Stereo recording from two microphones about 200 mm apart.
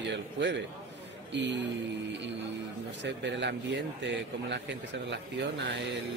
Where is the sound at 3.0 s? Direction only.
60° right (ahead or behind).